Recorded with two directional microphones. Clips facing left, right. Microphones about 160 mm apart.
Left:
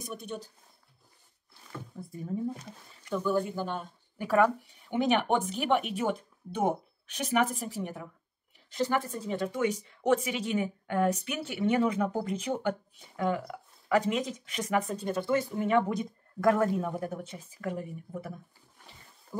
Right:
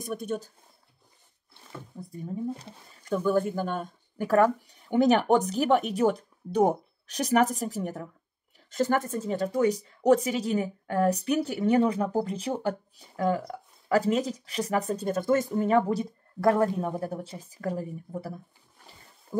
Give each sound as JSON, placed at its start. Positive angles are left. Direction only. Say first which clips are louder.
{"t": 0.0, "sound": "speech", "louder": "right 7 dB", "side_deg": -50}
{"t": 2.0, "sound": "speech", "louder": "right 4 dB", "side_deg": -30}
{"t": 2.6, "sound": "speech", "louder": "right 1 dB", "side_deg": -45}